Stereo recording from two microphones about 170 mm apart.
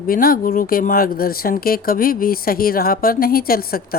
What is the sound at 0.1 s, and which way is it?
A woman's voice, 60° left (ahead or behind).